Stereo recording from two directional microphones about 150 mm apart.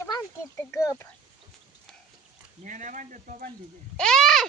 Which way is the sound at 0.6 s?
15° left (ahead or behind).